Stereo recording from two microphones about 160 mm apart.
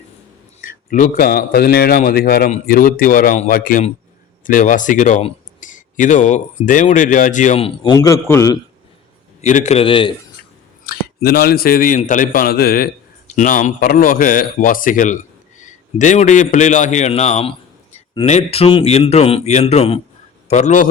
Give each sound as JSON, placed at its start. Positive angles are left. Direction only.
{"t": 0.6, "sound": "a man's voice", "side_deg": 55}
{"t": 2.6, "sound": "speech", "side_deg": 65}
{"t": 7.9, "sound": "a man's voice", "side_deg": 20}
{"t": 9.4, "sound": "a man's voice", "side_deg": 45}
{"t": 10.8, "sound": "speech", "side_deg": 75}
{"t": 11.9, "sound": "speech", "side_deg": 50}
{"t": 13.3, "sound": "a man's voice", "side_deg": 55}